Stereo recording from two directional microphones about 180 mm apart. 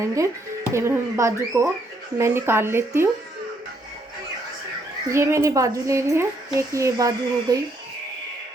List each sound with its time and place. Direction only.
0.0 s a woman's voice: 15° right (ahead or behind)
5.0 s a woman's voice: 15° right (ahead or behind)